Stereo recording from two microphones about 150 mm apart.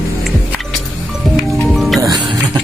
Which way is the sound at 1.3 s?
Centre (ahead or behind).